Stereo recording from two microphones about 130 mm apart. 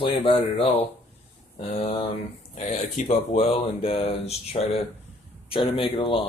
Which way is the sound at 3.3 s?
45° left (ahead or behind).